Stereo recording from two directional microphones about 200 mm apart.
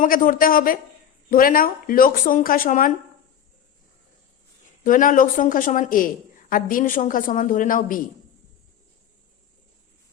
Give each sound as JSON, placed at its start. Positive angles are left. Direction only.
{"t": 0.0, "sound": "a woman's voice", "side_deg": 45}
{"t": 4.8, "sound": "a woman's voice", "side_deg": 40}